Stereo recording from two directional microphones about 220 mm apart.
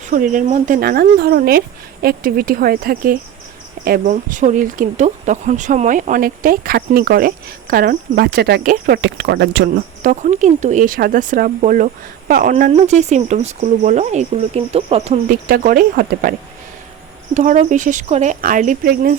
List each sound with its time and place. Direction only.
0.0 s speech: 40° right (ahead or behind)
10.0 s speech: 35° right (ahead or behind)
17.3 s speech: 35° right (ahead or behind)